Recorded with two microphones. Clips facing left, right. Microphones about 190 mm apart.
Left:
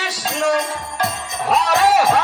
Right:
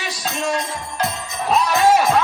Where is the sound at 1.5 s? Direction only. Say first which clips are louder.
Even; 75° left (ahead or behind).